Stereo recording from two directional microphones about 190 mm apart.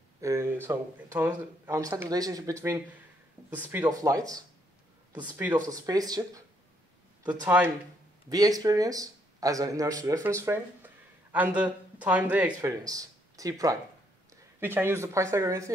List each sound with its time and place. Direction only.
0.2 s speech: 15° right (ahead or behind)